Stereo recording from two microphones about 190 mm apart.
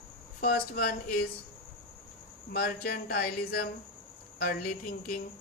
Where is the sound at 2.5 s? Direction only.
55° left (ahead or behind).